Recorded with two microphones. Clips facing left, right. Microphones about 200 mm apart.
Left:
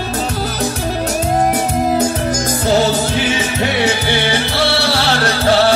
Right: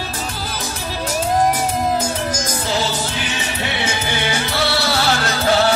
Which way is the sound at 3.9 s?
30° left (ahead or behind).